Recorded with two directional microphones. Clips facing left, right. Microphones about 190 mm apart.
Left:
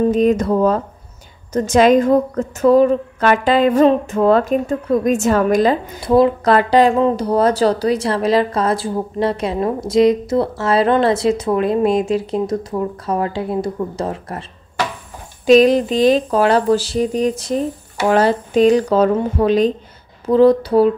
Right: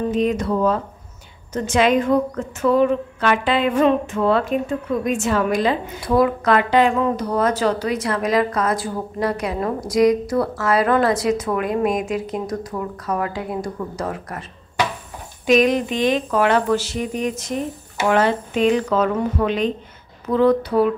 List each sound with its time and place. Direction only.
0.1 s speech: 45° left (ahead or behind)
6.0 s speech: 25° left (ahead or behind)
15.4 s speech: 35° left (ahead or behind)